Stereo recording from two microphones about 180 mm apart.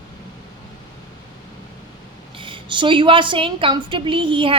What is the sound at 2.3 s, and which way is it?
A woman's voice, 25° right (ahead or behind).